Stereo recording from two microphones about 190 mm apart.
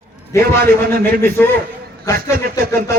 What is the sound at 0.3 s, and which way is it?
A man's voice, 15° left (ahead or behind).